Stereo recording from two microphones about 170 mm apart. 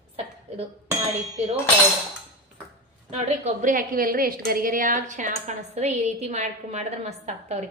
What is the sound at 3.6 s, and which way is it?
A woman's voice, 55° right (ahead or behind).